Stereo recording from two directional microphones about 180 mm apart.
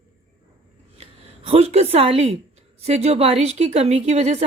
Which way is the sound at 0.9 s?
35° right (ahead or behind).